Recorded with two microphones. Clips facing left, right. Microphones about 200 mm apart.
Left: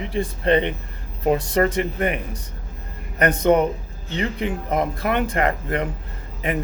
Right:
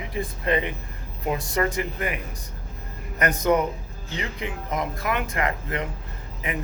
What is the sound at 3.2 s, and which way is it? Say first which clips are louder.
Speech: left 5 dB; 30° left (ahead or behind).